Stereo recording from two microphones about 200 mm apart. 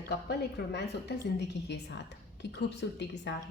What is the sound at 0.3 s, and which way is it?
Speech, 55° left (ahead or behind).